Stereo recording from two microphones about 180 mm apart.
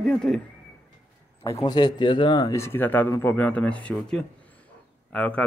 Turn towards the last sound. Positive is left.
turn(degrees=10)  # may be behind; listen again after turning